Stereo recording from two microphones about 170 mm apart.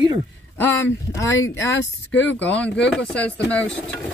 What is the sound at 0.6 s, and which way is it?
Speech, 15° left (ahead or behind).